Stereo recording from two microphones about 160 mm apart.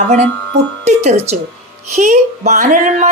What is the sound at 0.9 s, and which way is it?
A woman's voice, 45° right (ahead or behind).